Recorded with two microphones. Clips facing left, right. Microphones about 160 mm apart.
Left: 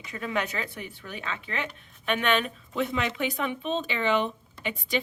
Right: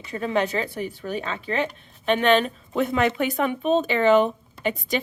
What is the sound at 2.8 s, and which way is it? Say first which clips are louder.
Speech: right 6 dB; 50° right (ahead or behind).